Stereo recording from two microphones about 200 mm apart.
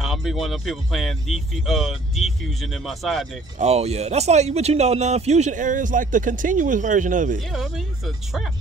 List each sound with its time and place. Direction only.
0.0 s speech: centre (ahead or behind)
3.5 s speech: 30° right (ahead or behind)
7.3 s speech: centre (ahead or behind)